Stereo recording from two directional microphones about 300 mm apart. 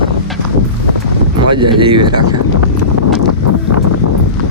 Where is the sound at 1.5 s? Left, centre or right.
Centre.